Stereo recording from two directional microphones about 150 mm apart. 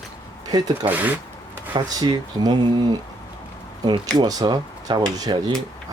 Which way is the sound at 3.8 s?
25° right (ahead or behind).